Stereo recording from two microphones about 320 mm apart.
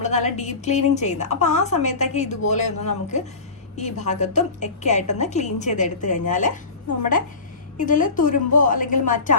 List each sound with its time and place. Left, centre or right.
0.0 s a woman's voice: left
7.9 s a woman's voice: left